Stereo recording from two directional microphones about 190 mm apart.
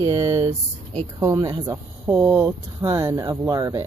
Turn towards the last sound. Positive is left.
turn(degrees=-20)  # may be behind; listen again after turning